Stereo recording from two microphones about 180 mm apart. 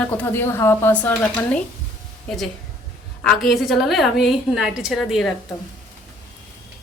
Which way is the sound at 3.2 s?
Centre (ahead or behind).